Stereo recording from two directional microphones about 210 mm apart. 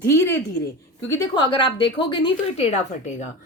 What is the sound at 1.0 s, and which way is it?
A woman's voice, 20° left (ahead or behind).